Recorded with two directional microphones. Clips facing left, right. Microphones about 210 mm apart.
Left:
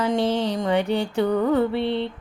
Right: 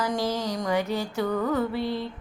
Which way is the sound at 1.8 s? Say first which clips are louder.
Left 5 dB; 70° left (ahead or behind).